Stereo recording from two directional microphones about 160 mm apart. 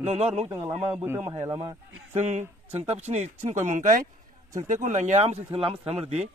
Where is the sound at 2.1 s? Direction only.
45° right (ahead or behind).